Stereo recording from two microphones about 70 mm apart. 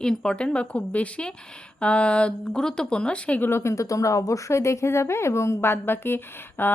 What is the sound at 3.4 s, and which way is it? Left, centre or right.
Speech, left.